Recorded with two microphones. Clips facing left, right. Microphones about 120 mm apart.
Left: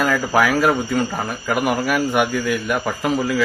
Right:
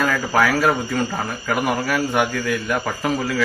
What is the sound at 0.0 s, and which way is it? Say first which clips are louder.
Speech: left 1 dB; 20° left (ahead or behind).